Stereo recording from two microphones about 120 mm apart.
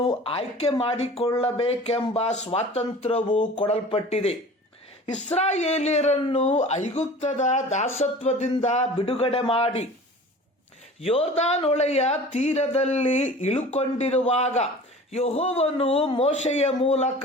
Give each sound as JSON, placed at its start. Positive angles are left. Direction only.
{"t": 0.0, "sound": "speech", "side_deg": 50}
{"t": 3.3, "sound": "speech", "side_deg": 40}
{"t": 3.7, "sound": "speech", "side_deg": 55}
{"t": 7.9, "sound": "speech", "side_deg": 65}
{"t": 11.0, "sound": "speech", "side_deg": 60}